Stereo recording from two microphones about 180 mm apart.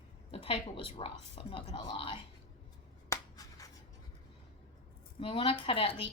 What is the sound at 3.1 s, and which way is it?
Finger snapping, 20° left (ahead or behind).